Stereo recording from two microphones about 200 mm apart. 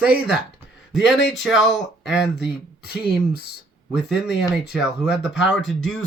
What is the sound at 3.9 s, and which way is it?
Speech, 5° right (ahead or behind).